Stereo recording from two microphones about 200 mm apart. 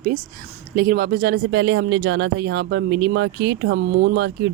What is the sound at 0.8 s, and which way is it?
Speech, 45° right (ahead or behind).